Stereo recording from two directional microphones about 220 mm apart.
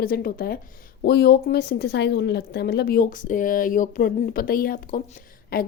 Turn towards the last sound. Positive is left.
turn(degrees=40)  # may be behind; listen again after turning